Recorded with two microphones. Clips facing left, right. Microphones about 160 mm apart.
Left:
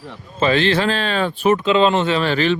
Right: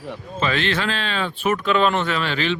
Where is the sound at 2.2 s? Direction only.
40° left (ahead or behind).